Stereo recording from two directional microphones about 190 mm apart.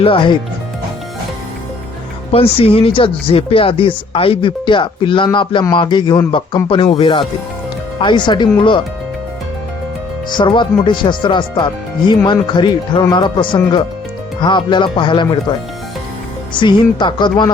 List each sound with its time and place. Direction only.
0.0 s speech: 25° left (ahead or behind)
2.3 s speech: 30° left (ahead or behind)
10.2 s speech: 25° left (ahead or behind)
16.6 s speech: 25° left (ahead or behind)